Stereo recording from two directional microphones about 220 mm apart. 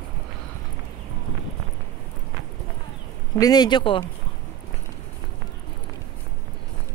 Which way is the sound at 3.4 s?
20° left (ahead or behind).